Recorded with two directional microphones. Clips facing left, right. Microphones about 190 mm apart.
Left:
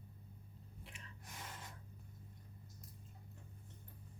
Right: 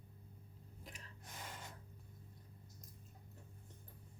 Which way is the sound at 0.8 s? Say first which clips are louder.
Right 2 dB; 40° right (ahead or behind).